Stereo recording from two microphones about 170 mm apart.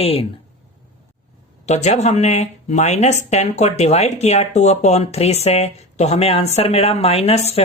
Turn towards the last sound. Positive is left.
turn(degrees=40)  # may be behind; listen again after turning